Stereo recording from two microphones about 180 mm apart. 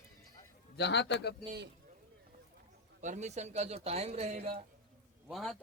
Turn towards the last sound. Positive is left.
turn(degrees=0)  # may be behind; listen again after turning